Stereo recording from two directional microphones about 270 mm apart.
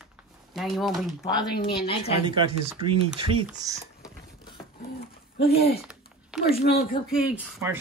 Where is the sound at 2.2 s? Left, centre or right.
Centre.